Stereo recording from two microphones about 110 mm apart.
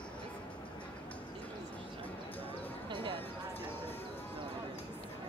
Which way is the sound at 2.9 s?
50° right (ahead or behind).